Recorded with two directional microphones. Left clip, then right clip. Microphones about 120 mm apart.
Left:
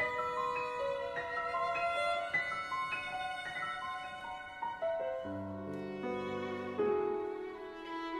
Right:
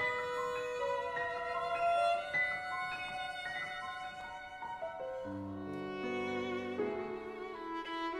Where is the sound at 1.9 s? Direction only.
5° right (ahead or behind).